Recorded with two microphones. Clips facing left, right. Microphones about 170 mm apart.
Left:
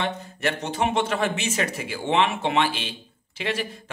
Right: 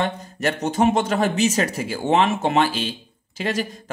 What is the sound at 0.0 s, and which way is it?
A man's voice, 40° right (ahead or behind).